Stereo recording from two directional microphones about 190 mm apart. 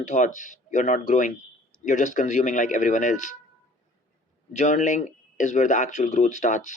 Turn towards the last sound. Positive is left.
turn(degrees=40)  # may be behind; listen again after turning